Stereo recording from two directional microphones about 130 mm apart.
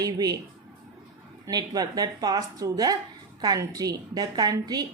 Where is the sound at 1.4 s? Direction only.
30° right (ahead or behind).